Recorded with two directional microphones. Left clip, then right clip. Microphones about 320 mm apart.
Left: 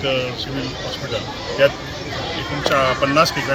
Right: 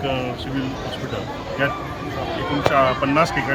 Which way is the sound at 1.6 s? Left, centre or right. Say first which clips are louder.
Left 7 dB; centre.